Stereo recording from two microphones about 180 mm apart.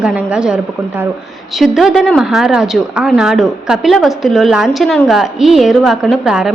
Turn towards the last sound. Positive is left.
turn(degrees=-5)  # may be behind; listen again after turning